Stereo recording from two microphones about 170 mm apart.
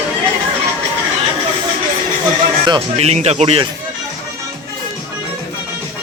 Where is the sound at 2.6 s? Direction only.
30° right (ahead or behind).